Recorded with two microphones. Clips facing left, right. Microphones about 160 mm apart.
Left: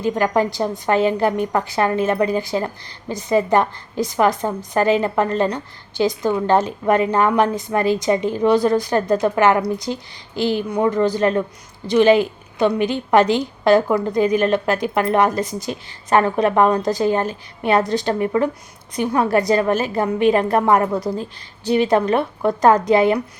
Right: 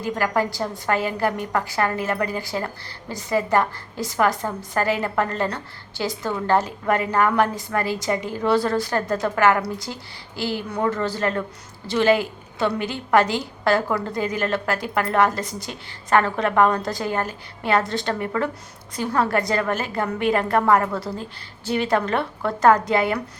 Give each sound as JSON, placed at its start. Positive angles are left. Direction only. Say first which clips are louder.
{"t": 0.0, "sound": "a woman's voice", "louder": "left 5 dB", "side_deg": 20}